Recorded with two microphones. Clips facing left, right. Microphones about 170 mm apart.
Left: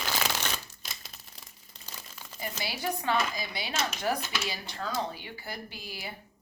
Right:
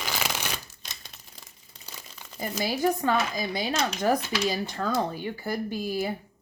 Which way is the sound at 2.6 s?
45° right (ahead or behind).